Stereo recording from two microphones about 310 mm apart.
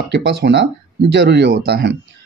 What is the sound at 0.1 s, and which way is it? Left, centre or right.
Speech, right.